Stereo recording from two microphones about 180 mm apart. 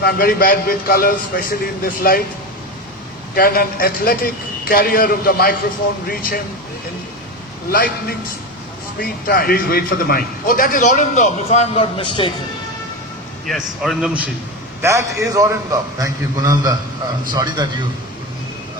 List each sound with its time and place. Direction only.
0.0 s a man's voice: 55° left (ahead or behind)
3.3 s a man's voice: 55° left (ahead or behind)
7.7 s a man's voice: 55° left (ahead or behind); by 12.3 s 30° left (ahead or behind)
13.5 s a man's voice: centre (ahead or behind)
14.8 s a man's voice: 15° right (ahead or behind)